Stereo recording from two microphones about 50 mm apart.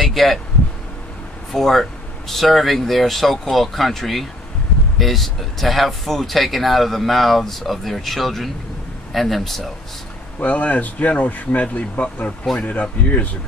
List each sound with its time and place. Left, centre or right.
0.0 s a sound: centre
1.5 s speech: centre
10.4 s speech: left